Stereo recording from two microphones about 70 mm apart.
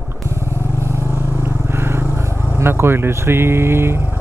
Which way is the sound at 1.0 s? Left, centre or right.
Left.